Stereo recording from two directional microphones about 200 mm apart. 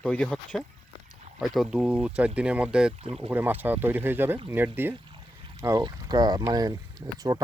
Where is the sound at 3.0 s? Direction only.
30° right (ahead or behind).